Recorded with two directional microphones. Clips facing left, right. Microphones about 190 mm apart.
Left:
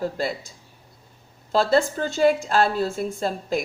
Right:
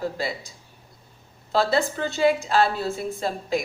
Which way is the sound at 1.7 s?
45° left (ahead or behind).